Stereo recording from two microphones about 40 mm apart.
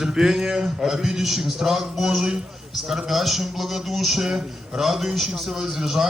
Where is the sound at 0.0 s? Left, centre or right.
Centre.